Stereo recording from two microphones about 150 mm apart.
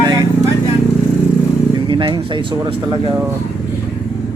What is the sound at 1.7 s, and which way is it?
Speech, 35° right (ahead or behind).